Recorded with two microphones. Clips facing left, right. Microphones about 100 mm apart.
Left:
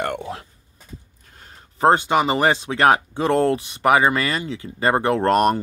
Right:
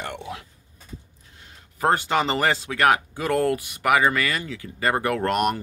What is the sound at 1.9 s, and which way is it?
Speech, 20° left (ahead or behind).